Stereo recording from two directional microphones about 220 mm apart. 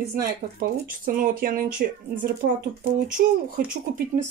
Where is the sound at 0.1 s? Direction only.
40° right (ahead or behind).